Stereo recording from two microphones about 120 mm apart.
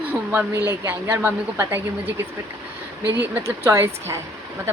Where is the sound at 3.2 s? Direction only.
20° right (ahead or behind).